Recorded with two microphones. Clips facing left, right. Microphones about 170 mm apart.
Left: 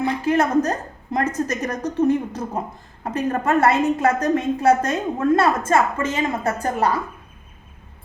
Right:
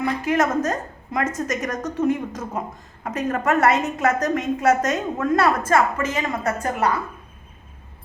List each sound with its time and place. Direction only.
0.0 s a woman's voice: 30° left (ahead or behind)